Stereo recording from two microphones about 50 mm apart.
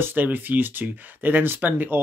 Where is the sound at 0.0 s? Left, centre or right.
Right.